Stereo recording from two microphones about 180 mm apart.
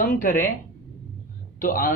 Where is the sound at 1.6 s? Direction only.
50° left (ahead or behind).